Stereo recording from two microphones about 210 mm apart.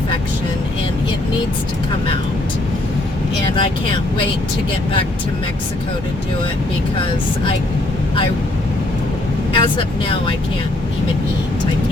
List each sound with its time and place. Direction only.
3.5 s speech: 25° left (ahead or behind)
9.6 s speech: 25° left (ahead or behind)